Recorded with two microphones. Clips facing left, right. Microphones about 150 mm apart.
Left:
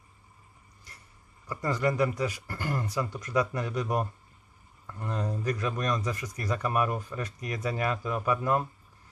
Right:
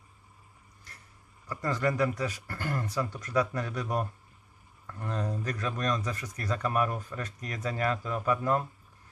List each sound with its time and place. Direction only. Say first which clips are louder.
1.5 s speech: left 1 dB; 15° left (ahead or behind)